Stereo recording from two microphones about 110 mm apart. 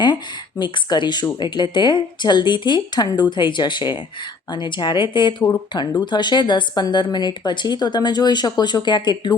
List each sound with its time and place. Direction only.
0.6 s a woman's voice: 40° left (ahead or behind)